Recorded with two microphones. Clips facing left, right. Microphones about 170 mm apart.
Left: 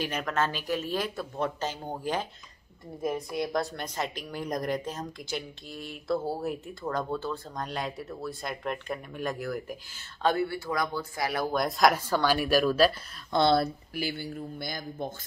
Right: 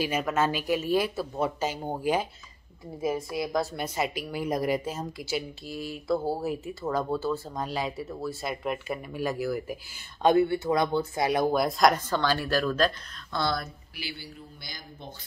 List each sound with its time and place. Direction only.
0.0 s a woman's voice: 5° right (ahead or behind)
10.2 s speech: 20° right (ahead or behind)
11.5 s speech: centre (ahead or behind)
13.3 s speech: 25° left (ahead or behind)
13.9 s speech: 50° left (ahead or behind)